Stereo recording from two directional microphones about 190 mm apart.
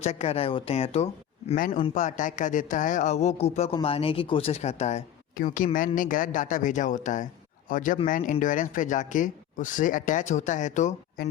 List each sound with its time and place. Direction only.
0.0 s speech: 35° left (ahead or behind)
1.5 s speech: 45° left (ahead or behind)